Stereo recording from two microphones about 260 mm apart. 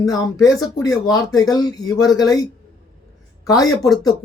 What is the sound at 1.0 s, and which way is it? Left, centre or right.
Speech, centre.